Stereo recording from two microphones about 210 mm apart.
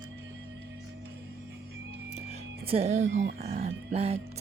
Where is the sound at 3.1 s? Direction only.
55° right (ahead or behind).